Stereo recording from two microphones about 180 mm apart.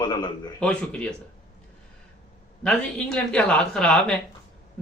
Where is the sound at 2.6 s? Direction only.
5° left (ahead or behind).